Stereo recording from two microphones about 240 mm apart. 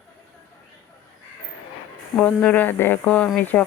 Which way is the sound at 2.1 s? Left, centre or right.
Centre.